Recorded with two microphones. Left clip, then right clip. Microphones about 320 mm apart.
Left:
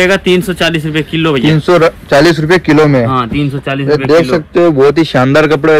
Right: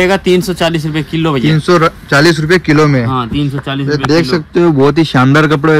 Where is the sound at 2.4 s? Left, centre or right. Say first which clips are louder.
Left 2 dB; centre.